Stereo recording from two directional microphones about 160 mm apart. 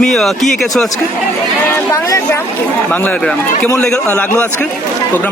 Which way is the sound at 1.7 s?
15° left (ahead or behind).